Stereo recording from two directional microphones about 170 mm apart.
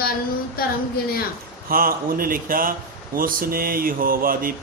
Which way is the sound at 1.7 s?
60° right (ahead or behind).